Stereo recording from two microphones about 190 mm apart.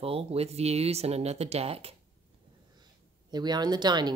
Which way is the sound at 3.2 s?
20° right (ahead or behind).